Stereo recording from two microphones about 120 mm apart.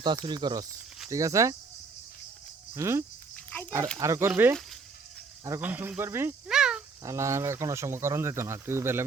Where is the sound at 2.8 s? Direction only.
25° right (ahead or behind).